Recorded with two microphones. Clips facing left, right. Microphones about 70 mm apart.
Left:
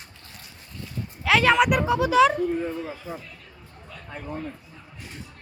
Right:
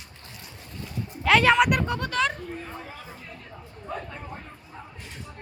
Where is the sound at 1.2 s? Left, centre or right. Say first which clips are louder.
Even; centre.